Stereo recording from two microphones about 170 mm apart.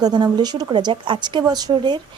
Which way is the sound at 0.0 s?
25° right (ahead or behind).